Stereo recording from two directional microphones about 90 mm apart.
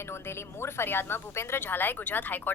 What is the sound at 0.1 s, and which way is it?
A woman's voice, 30° left (ahead or behind).